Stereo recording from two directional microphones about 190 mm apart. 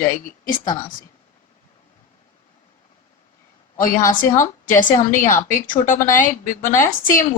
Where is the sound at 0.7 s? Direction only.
20° left (ahead or behind).